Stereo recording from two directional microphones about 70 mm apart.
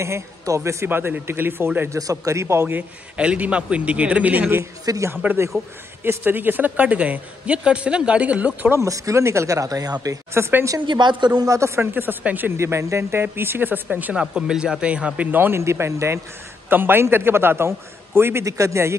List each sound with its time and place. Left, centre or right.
0.0 s speech: right
0.8 s a man's voice: right
1.9 s speech: right
2.6 s a woman's voice: centre
8.8 s speech: right
10.3 s a man's voice: right
10.9 s a woman's voice: right
11.4 s a woman's voice: right
12.5 s a man's voice: right
13.8 s a woman's voice: centre
15.3 s a man's voice: right
18.4 s speech: right